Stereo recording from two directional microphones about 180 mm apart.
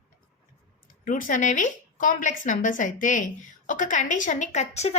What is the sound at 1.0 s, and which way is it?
A woman's voice, 50° left (ahead or behind).